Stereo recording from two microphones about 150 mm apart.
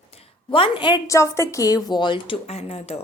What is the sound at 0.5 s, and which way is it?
A woman's voice, 35° left (ahead or behind).